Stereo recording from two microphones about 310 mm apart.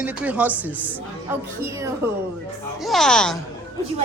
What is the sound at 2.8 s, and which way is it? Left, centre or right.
Speech, centre.